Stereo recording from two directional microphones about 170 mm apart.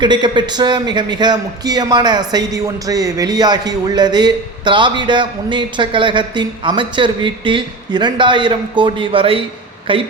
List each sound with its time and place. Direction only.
0.0 s a man's voice: 25° right (ahead or behind)